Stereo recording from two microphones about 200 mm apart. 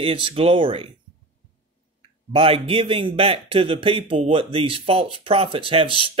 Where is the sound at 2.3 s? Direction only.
30° right (ahead or behind).